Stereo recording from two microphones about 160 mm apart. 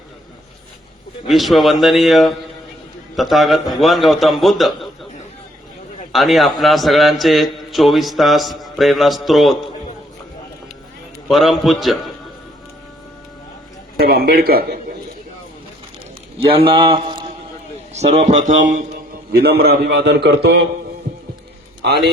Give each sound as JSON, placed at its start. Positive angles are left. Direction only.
{"t": 1.3, "sound": "a man's voice", "side_deg": 0}
{"t": 6.1, "sound": "a man's voice", "side_deg": 0}
{"t": 11.3, "sound": "a man's voice", "side_deg": 0}
{"t": 14.0, "sound": "a man's voice", "side_deg": -75}
{"t": 16.4, "sound": "a man's voice", "side_deg": -35}
{"t": 17.9, "sound": "speech", "side_deg": -45}
{"t": 19.3, "sound": "a man's voice", "side_deg": -75}
{"t": 21.8, "sound": "a man's voice", "side_deg": -90}